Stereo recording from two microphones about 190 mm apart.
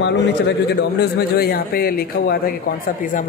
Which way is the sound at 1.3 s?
55° left (ahead or behind).